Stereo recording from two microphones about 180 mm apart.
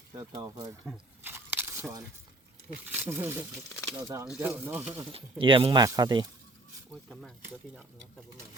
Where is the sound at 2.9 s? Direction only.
10° right (ahead or behind).